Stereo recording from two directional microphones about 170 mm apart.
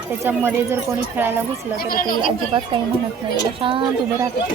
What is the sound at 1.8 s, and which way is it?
Speech, 60° left (ahead or behind).